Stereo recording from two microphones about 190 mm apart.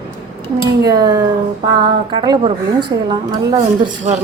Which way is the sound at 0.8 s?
20° right (ahead or behind).